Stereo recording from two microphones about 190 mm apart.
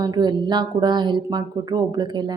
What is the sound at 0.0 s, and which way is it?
Speech, 20° right (ahead or behind).